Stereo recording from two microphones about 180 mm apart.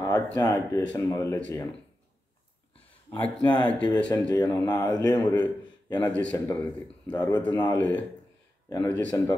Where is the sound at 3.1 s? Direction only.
15° left (ahead or behind).